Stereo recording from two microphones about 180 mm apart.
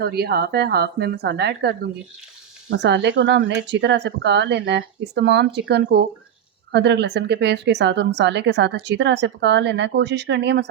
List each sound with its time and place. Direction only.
0.0 s speech: 60° right (ahead or behind)
2.6 s speech: 75° right (ahead or behind)